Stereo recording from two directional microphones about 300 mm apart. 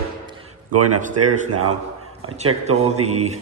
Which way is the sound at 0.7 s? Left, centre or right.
Right.